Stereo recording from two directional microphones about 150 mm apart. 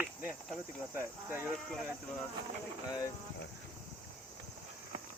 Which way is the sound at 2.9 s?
25° left (ahead or behind).